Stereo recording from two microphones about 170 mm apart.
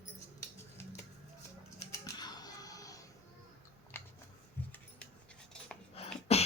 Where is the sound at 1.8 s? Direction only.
20° left (ahead or behind).